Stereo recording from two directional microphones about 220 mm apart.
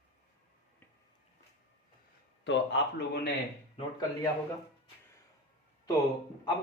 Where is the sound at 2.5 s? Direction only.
50° left (ahead or behind).